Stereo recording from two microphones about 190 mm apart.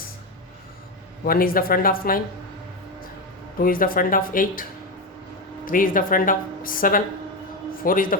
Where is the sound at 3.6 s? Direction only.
50° left (ahead or behind).